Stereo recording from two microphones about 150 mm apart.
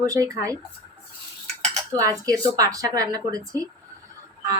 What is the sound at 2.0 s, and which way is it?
Speech, 25° right (ahead or behind).